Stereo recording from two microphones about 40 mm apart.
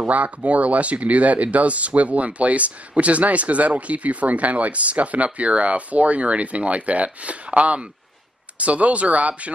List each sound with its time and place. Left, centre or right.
0.0 s speech: right